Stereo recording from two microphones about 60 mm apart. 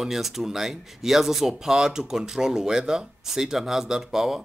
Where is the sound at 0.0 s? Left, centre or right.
Centre.